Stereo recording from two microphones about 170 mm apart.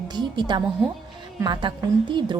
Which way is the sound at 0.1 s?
25° right (ahead or behind).